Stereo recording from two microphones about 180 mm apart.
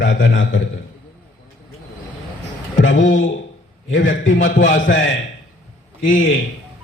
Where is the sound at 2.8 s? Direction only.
90° left.